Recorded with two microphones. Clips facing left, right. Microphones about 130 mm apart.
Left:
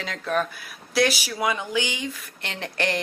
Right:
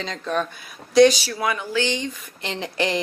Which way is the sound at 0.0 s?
5° left (ahead or behind).